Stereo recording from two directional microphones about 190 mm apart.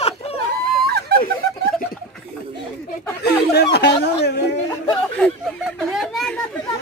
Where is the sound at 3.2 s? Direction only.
60° left (ahead or behind).